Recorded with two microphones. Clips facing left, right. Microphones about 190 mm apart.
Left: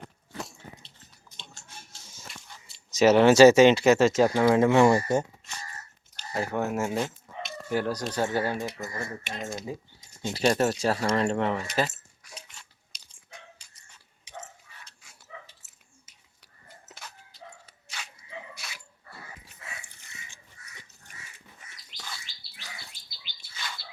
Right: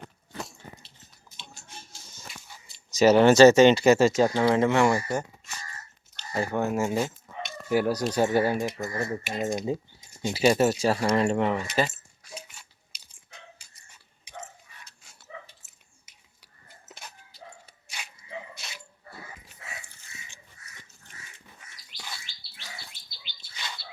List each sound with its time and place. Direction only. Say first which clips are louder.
0.8 s a sound: even; 20° left (ahead or behind)
2.0 s a sound: right 1 dB; centre (ahead or behind)
2.9 s speech: right 1 dB; centre (ahead or behind); by 5.2 s 20° left (ahead or behind)
6.1 s chicken: right 1 dB; centre (ahead or behind)
7.7 s speech: right 4 dB; 10° right (ahead or behind)
9.2 s speech: right 7 dB; 10° right (ahead or behind)
12.3 s a sound: right 5 dB; 5° right (ahead or behind)
15.6 s finger snapping: right 1 dB; centre (ahead or behind)
17.3 s dog: right 1 dB; 10° right (ahead or behind)